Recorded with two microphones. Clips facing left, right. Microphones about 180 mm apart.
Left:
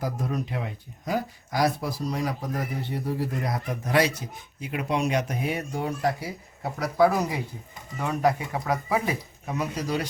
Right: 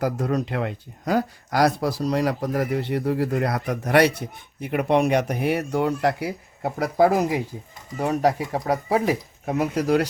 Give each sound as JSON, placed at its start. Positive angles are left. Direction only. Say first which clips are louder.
{"t": 0.0, "sound": "speech", "louder": "right 6 dB", "side_deg": -75}
{"t": 9.0, "sound": "speech", "louder": "right 6 dB", "side_deg": -60}